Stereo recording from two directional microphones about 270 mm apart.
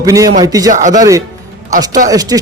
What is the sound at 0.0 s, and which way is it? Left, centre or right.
Speech, centre.